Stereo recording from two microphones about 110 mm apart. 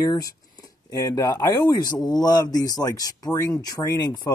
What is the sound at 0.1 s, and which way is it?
Speech, 35° left (ahead or behind).